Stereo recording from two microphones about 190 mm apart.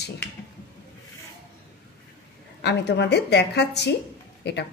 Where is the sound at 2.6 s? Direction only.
65° left (ahead or behind).